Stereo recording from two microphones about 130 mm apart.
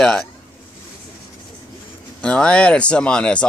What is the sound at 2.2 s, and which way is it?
Speech, 10° left (ahead or behind).